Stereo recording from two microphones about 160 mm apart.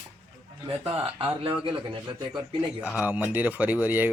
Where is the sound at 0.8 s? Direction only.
35° right (ahead or behind).